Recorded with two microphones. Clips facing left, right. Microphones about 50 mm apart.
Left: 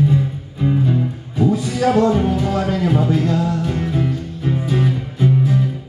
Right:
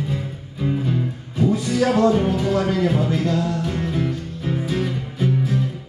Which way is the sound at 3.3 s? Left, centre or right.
Centre.